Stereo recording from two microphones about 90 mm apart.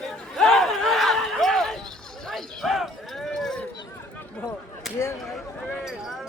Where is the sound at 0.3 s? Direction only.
5° left (ahead or behind).